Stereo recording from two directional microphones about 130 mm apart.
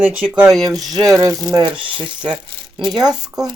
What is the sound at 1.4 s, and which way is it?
Speech, 30° right (ahead or behind).